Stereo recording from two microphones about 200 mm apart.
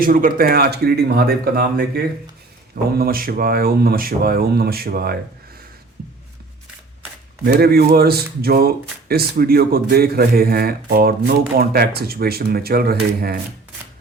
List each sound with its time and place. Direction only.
0.0 s speech: 45° right (ahead or behind)
7.4 s speech: 50° right (ahead or behind)